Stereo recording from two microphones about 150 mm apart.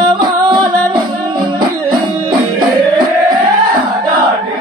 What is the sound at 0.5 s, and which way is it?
Music, 30° right (ahead or behind).